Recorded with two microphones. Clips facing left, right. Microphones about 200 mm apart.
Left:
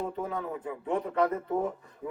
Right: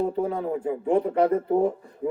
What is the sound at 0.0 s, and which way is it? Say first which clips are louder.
A man's voice: right 8 dB; 30° right (ahead or behind).